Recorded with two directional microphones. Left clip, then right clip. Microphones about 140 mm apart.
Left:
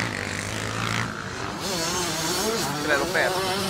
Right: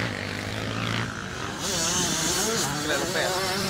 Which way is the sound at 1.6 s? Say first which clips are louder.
Right 1 dB; 45° left (ahead or behind).